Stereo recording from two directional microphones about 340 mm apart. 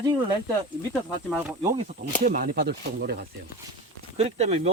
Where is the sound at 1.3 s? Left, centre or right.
Centre.